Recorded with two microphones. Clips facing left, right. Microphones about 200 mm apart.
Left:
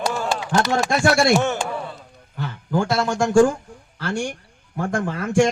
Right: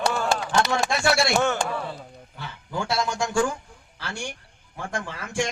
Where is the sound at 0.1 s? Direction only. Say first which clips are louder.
Left 1 dB; 5° left (ahead or behind).